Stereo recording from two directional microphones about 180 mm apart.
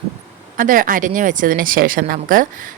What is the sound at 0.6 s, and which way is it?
Speech, 50° right (ahead or behind).